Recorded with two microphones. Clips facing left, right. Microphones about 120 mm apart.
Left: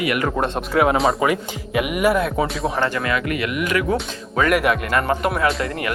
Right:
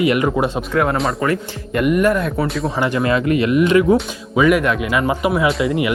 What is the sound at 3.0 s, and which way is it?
Speech, 25° right (ahead or behind).